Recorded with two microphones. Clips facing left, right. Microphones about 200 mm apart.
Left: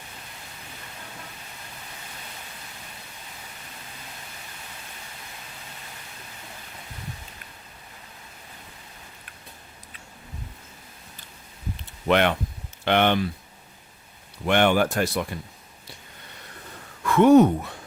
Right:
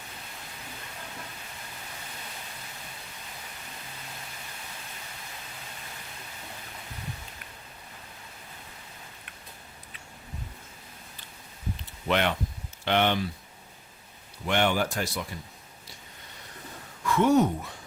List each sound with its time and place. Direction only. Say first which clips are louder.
12.0 s speech: left 5 dB; 60° left (ahead or behind)
14.4 s speech: left 6 dB; 60° left (ahead or behind)
17.1 s speech: left 7 dB; 60° left (ahead or behind)